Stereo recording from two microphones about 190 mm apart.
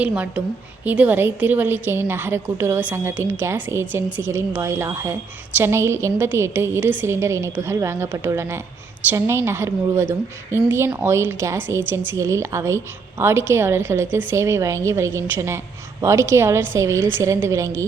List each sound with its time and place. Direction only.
0.0 s a woman's voice: 10° right (ahead or behind)